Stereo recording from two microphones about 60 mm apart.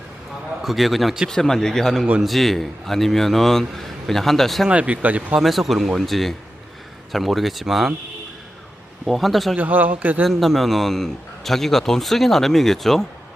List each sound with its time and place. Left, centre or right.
0.6 s a man's voice: centre
4.7 s speech: right
5.4 s a man's voice: centre
9.0 s a man's voice: centre
9.6 s speech: right
10.2 s a man's voice: centre